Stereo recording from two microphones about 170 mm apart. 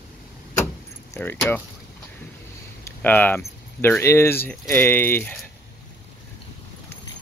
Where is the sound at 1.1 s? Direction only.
10° left (ahead or behind).